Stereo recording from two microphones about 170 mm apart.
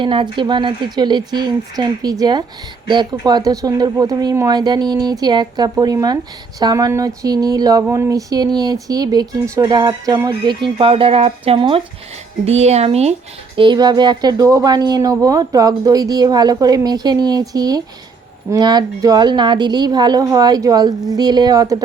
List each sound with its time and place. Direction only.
0.0 s speech: 30° right (ahead or behind)
13.6 s speech: 25° right (ahead or behind)